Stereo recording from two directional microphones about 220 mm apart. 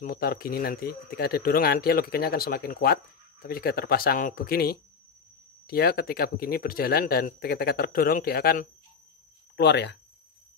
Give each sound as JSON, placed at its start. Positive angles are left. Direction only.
{"t": 0.0, "sound": "a man's voice", "side_deg": 40}